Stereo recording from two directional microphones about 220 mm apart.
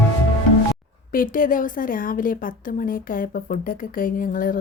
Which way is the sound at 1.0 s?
40° left (ahead or behind).